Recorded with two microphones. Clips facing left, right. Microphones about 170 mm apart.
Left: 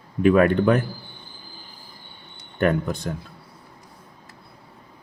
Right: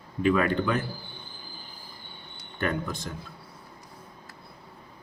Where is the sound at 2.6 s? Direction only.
55° left (ahead or behind).